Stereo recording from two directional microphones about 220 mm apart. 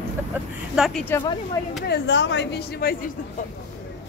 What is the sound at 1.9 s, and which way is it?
Speech, 55° left (ahead or behind).